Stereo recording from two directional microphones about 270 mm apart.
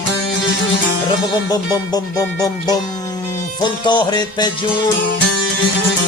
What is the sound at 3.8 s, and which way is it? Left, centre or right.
Music, centre.